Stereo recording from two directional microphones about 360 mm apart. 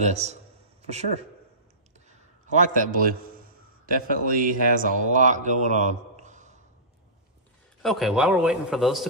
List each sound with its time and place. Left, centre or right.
0.0 s a man's voice: centre
2.0 s a man's voice: centre
7.8 s a man's voice: centre